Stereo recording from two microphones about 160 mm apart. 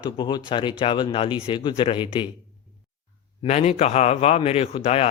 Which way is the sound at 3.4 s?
45° left (ahead or behind).